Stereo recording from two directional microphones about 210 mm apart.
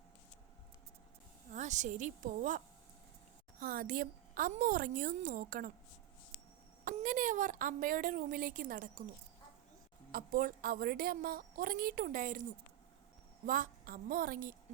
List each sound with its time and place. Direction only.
1.5 s a woman's voice: 35° right (ahead or behind)
3.6 s a woman's voice: 40° right (ahead or behind)
6.8 s a woman's voice: 40° right (ahead or behind)
10.1 s a woman's voice: 45° right (ahead or behind)
13.4 s a woman's voice: 40° right (ahead or behind)